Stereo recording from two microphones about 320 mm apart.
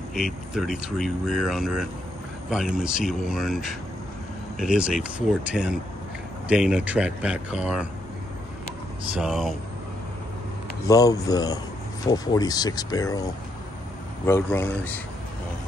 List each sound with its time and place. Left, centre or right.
0.1 s speech: centre
9.2 s speech: centre
10.9 s speech: centre
14.2 s speech: centre